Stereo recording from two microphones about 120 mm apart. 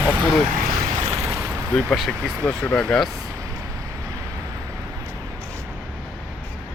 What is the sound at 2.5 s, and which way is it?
Speech, 10° left (ahead or behind).